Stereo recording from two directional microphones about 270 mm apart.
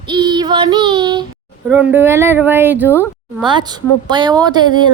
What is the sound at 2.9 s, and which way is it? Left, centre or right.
Speech, centre.